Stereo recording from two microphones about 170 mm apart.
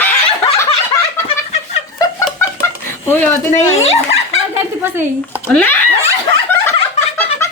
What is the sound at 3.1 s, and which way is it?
Speech, 10° left (ahead or behind).